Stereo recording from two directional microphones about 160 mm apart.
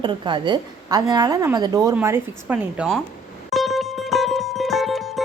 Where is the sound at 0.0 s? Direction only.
30° right (ahead or behind); by 3.0 s 5° right (ahead or behind).